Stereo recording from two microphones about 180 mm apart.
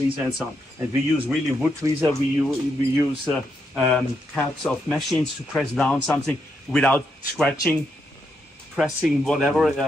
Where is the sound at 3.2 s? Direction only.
10° left (ahead or behind).